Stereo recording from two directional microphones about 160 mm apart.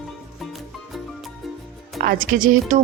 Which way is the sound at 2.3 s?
60° right (ahead or behind).